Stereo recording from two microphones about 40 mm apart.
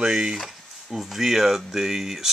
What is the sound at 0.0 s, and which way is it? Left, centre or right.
Speech, centre.